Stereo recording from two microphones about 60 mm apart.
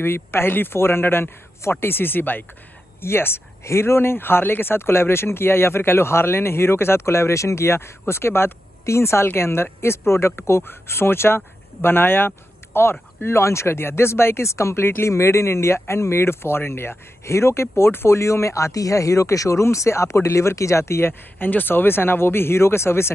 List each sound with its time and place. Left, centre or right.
0.0 s speech: left